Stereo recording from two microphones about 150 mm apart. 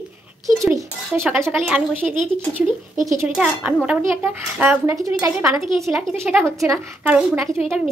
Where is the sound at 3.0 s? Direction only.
20° right (ahead or behind).